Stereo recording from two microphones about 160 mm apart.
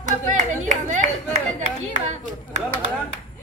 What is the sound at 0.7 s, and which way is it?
Speech, 50° right (ahead or behind).